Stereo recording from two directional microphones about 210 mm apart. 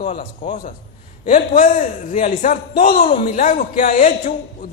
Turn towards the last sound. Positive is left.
turn(degrees=40)  # may be behind; listen again after turning